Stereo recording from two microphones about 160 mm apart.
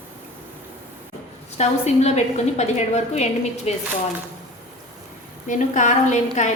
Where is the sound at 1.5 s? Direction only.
45° left (ahead or behind).